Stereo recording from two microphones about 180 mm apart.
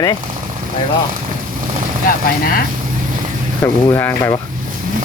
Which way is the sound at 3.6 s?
10° left (ahead or behind).